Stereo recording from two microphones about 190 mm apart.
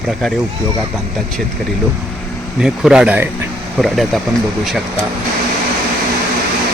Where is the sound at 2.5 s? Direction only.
5° right (ahead or behind).